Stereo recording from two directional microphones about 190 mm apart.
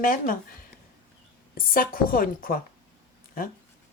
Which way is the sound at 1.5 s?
50° left (ahead or behind).